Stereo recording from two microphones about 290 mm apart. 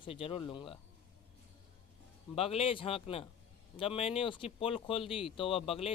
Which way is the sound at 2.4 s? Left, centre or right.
Centre.